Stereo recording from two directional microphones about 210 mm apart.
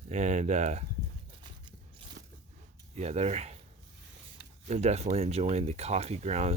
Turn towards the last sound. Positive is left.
turn(degrees=-30)  # may be behind; listen again after turning